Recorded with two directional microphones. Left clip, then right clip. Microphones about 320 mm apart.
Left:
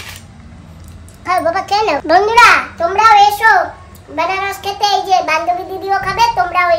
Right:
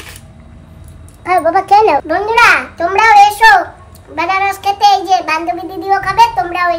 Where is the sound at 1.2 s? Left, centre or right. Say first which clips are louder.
Right 3 dB; centre.